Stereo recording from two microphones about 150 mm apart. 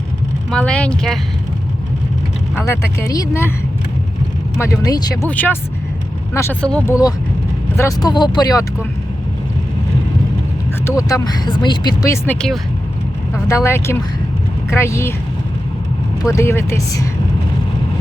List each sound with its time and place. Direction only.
0.5 s speech: 5° left (ahead or behind)
2.6 s speech: 20° left (ahead or behind)
4.6 s speech: 25° left (ahead or behind)
5.3 s speech: 10° left (ahead or behind)
7.8 s speech: 25° left (ahead or behind)
10.8 s speech: 20° left (ahead or behind)
13.5 s speech: 20° left (ahead or behind)
16.2 s speech: 20° left (ahead or behind)